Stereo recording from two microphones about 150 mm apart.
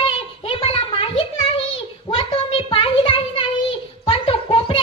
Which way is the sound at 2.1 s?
40° left (ahead or behind).